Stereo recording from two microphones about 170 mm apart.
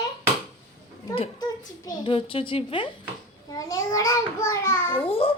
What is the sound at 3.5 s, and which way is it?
A child's voice, 20° left (ahead or behind).